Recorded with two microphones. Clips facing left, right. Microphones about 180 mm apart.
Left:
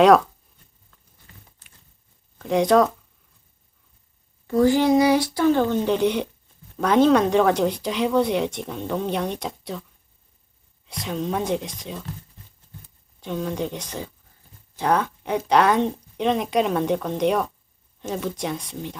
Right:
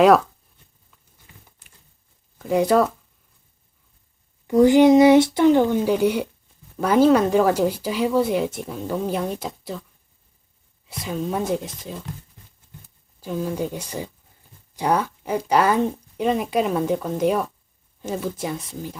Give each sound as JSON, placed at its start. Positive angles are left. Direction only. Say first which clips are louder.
{"t": 2.4, "sound": "speech", "louder": "even", "side_deg": -5}
{"t": 4.4, "sound": "speech", "louder": "right 5 dB", "side_deg": -20}
{"t": 10.8, "sound": "speech", "louder": "even", "side_deg": -5}
{"t": 13.1, "sound": "speech", "louder": "right 1 dB", "side_deg": -5}